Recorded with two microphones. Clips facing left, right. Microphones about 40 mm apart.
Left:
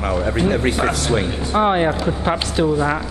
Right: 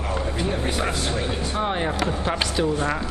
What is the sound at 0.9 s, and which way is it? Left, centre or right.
Speech, left.